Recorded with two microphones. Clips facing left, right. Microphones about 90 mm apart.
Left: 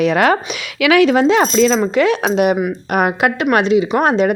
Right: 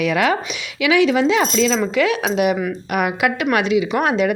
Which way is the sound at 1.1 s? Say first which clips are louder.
Left 4 dB; 40° left (ahead or behind).